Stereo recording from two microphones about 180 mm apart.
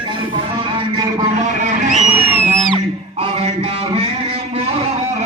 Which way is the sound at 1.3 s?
45° right (ahead or behind).